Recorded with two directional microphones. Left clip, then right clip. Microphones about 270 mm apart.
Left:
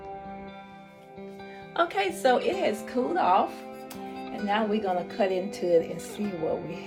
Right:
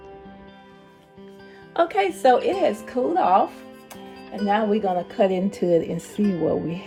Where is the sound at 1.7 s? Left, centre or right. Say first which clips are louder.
Right 5 dB; right.